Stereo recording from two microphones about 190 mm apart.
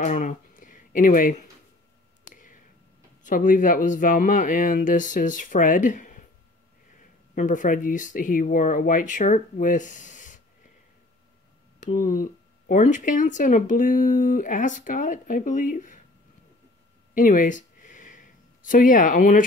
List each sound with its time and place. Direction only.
0.0 s speech: 40° left (ahead or behind)
2.2 s a sound: 45° left (ahead or behind)
3.3 s speech: 45° left (ahead or behind)
7.3 s speech: 40° left (ahead or behind)
11.8 s speech: 45° left (ahead or behind)
17.1 s a sound: 45° left (ahead or behind)